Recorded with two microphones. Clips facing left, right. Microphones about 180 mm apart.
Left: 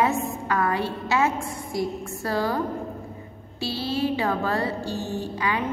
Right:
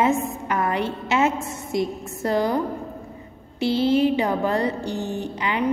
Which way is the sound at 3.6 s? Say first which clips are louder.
Right 7 dB; 20° right (ahead or behind).